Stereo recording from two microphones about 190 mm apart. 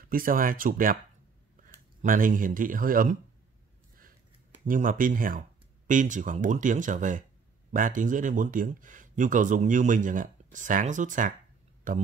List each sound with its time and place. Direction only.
0.1 s speech: 50° right (ahead or behind)
4.6 s speech: 45° right (ahead or behind)